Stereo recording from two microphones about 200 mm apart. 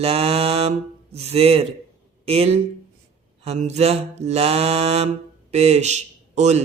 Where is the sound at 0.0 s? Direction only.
30° right (ahead or behind).